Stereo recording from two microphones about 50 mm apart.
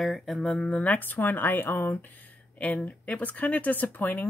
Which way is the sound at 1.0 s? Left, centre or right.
Left.